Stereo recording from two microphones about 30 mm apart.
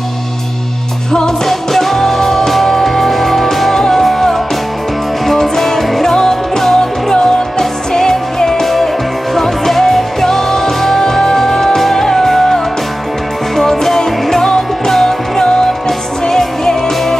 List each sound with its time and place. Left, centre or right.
1.1 s music: centre
6.0 s music: centre
8.6 s music: centre